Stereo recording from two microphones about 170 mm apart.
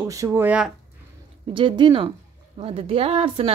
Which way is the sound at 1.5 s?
30° right (ahead or behind).